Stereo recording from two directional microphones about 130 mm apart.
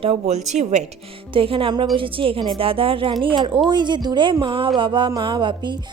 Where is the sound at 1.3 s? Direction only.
45° right (ahead or behind).